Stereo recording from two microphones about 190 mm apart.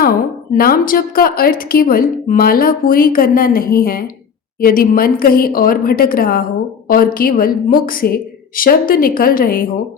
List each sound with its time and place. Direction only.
0.5 s speech: 50° left (ahead or behind)